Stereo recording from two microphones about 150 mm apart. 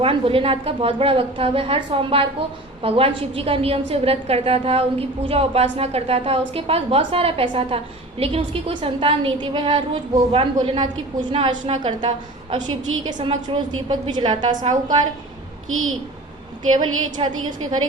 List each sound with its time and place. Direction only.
0.0 s a woman's voice: 35° right (ahead or behind)
14.6 s a woman's voice: 60° right (ahead or behind)
16.7 s a woman's voice: 30° right (ahead or behind)